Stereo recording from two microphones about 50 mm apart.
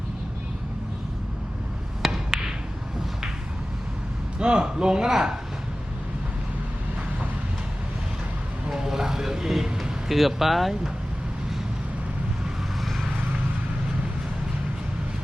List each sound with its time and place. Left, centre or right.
2.0 s ping: centre
4.4 s speech: centre
8.7 s speech: centre